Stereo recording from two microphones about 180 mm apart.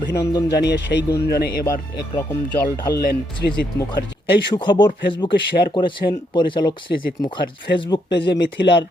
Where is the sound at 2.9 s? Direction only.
60° left (ahead or behind).